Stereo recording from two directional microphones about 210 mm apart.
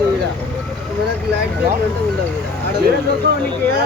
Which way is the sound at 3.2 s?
50° right (ahead or behind).